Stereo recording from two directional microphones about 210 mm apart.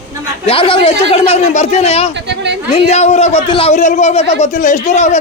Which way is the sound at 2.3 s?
55° right (ahead or behind).